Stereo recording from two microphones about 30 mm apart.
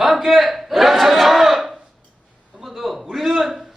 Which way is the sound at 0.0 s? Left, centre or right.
Centre.